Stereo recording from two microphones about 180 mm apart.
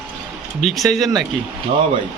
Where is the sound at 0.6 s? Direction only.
Centre (ahead or behind).